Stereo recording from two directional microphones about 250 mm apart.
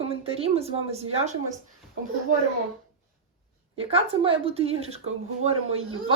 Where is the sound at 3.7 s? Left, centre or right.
Right.